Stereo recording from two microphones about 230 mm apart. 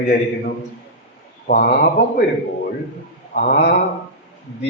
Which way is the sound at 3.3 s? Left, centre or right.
Left.